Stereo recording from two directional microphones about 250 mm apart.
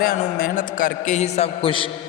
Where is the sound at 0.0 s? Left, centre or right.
Left.